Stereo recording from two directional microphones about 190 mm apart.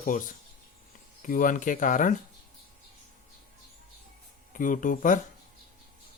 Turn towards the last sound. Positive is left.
turn(degrees=45)  # may be behind; listen again after turning